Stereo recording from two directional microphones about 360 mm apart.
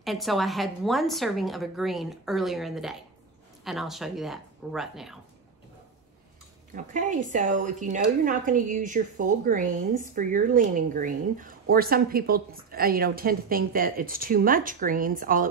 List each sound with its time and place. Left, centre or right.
0.0 s a woman's voice: centre
6.7 s a woman's voice: right